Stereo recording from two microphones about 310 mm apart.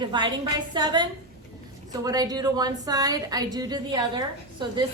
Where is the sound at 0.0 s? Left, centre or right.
Centre.